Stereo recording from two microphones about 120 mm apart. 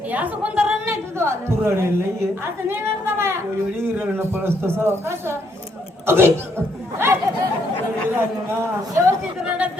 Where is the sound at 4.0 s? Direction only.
20° right (ahead or behind).